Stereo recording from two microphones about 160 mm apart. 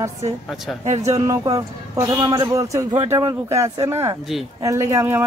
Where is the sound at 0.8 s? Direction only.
45° right (ahead or behind).